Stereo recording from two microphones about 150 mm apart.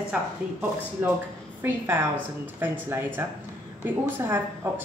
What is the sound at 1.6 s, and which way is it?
A woman's voice, 15° right (ahead or behind).